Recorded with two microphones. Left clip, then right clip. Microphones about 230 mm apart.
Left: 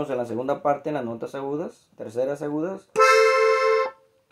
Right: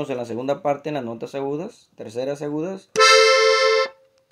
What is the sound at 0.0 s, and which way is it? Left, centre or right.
Speech, right.